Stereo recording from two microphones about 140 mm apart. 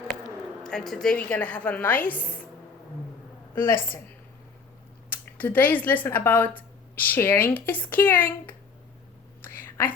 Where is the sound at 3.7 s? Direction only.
90° left.